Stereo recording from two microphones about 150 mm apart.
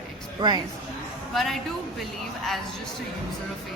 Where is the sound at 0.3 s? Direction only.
30° right (ahead or behind).